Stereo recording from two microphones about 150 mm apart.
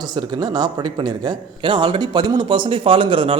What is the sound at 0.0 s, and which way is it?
A man's voice, 30° right (ahead or behind).